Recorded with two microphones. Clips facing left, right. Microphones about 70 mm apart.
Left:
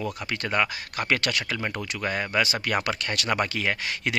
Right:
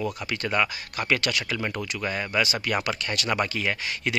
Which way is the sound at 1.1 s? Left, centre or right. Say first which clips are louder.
Right 1 dB; left.